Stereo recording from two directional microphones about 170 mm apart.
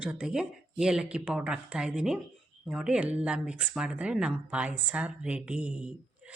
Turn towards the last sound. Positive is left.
turn(degrees=-5)  # may be behind; listen again after turning